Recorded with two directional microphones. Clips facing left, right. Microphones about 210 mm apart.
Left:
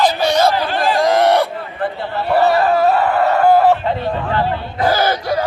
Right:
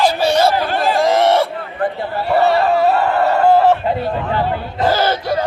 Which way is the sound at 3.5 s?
Centre (ahead or behind).